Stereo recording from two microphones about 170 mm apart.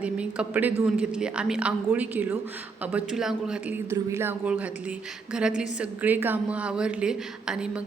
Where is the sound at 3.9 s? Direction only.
15° right (ahead or behind).